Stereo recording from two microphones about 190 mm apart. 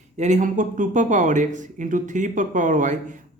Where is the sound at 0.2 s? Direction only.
40° right (ahead or behind).